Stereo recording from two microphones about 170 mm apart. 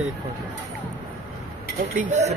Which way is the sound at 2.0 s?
45° right (ahead or behind).